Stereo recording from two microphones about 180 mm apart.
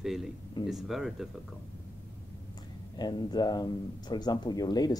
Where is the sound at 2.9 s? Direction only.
25° left (ahead or behind).